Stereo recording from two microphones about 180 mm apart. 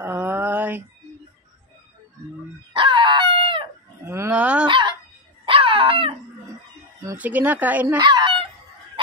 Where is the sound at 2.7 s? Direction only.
30° right (ahead or behind).